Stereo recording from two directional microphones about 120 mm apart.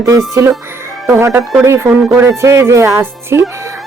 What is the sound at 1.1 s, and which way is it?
A man's voice, 20° right (ahead or behind).